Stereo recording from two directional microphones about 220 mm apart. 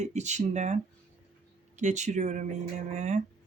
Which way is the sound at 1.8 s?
35° right (ahead or behind).